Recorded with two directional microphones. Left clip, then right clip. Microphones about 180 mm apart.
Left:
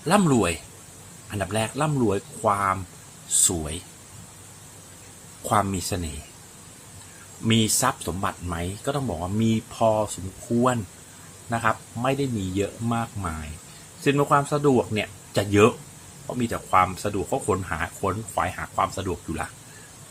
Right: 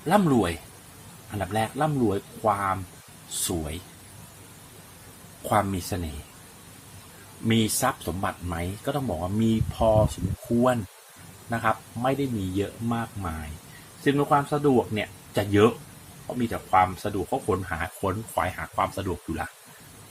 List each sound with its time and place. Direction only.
0.0 s speech: 25° left (ahead or behind)
5.5 s speech: 15° left (ahead or behind)
7.4 s speech: 20° left (ahead or behind)
11.4 s a man's voice: 15° left (ahead or behind)